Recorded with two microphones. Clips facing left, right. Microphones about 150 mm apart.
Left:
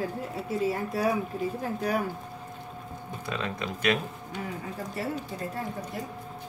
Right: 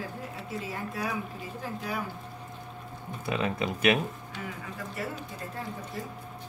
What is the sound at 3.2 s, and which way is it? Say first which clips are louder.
Speech: right 4 dB; 20° right (ahead or behind).